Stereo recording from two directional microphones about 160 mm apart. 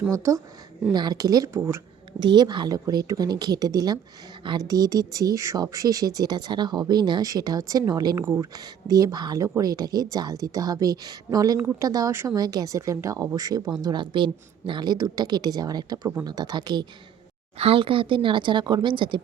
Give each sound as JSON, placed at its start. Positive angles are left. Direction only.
{"t": 0.1, "sound": "speech", "side_deg": -20}
{"t": 2.1, "sound": "speech", "side_deg": -25}